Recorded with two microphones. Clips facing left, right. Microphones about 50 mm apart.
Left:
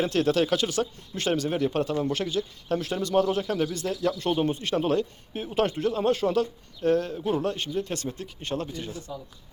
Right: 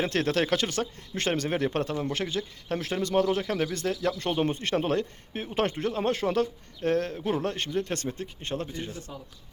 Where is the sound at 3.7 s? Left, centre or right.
Right.